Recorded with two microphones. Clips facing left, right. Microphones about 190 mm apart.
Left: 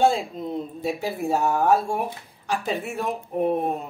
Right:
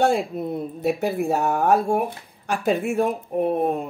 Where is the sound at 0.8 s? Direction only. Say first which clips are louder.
Right 5 dB; 55° right (ahead or behind).